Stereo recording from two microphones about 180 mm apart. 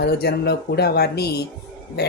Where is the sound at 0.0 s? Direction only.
65° left (ahead or behind).